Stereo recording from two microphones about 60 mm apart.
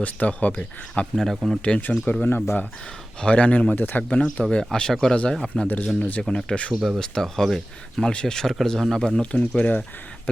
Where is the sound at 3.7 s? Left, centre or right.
Left.